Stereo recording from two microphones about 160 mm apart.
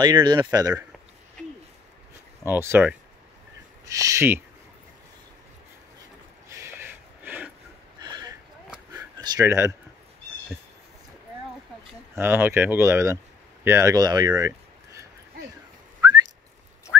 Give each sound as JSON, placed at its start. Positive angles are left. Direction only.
{"t": 0.0, "sound": "speech", "side_deg": -30}
{"t": 2.5, "sound": "speech", "side_deg": -15}
{"t": 6.5, "sound": "a sound", "side_deg": -15}
{"t": 8.9, "sound": "a sound", "side_deg": -20}
{"t": 12.2, "sound": "speech", "side_deg": -15}
{"t": 16.0, "sound": "whistling", "side_deg": -20}